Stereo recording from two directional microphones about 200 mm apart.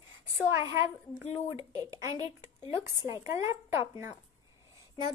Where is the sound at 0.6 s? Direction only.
15° right (ahead or behind).